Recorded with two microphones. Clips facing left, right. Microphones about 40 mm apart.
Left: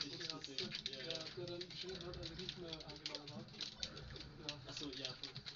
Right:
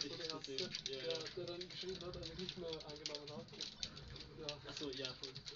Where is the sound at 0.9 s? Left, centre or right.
Centre.